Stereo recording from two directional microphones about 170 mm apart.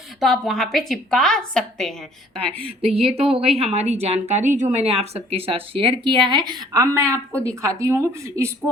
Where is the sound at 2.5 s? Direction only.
35° right (ahead or behind).